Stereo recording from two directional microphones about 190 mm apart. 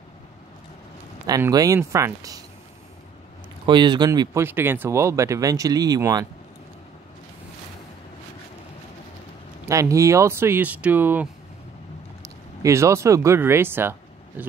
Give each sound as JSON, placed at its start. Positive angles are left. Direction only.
{"t": 1.2, "sound": "speech", "side_deg": -20}
{"t": 3.6, "sound": "speech", "side_deg": -25}
{"t": 9.7, "sound": "speech", "side_deg": -15}
{"t": 12.6, "sound": "speech", "side_deg": -15}